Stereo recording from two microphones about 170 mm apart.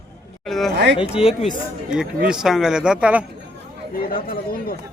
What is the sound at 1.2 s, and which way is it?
Speech, 35° left (ahead or behind).